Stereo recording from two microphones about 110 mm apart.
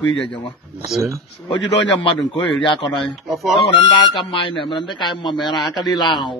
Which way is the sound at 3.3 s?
Centre (ahead or behind).